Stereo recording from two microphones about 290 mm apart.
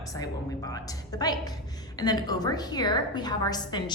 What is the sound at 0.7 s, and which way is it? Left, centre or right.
A woman's voice, centre.